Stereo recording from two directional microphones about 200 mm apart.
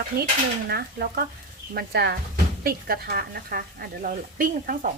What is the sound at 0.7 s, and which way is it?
Speech, 50° right (ahead or behind).